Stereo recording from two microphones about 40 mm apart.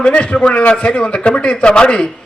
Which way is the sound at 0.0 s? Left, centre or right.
Left.